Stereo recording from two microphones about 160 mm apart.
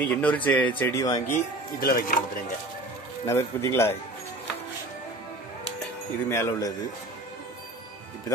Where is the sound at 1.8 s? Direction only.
65° left (ahead or behind).